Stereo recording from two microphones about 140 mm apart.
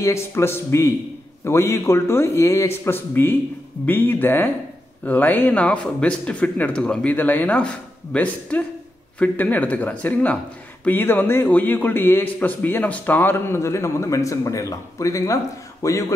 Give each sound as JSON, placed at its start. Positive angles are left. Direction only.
{"t": 0.0, "sound": "a man's voice", "side_deg": 20}